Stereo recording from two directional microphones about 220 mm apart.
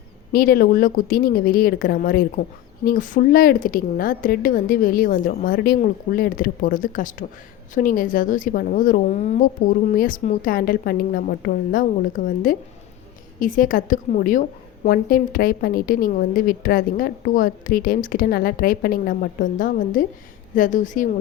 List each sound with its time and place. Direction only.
0.3 s a woman's voice: 45° left (ahead or behind)